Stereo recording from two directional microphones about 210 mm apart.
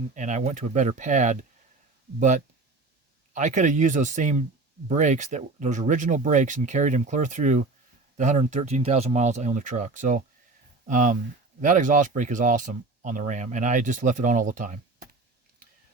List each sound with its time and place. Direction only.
0.1 s speech: 35° right (ahead or behind)